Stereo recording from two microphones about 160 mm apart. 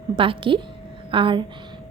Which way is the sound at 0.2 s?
35° right (ahead or behind).